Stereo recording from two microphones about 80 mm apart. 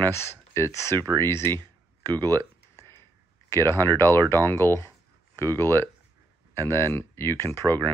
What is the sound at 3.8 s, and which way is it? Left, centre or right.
Speech, right.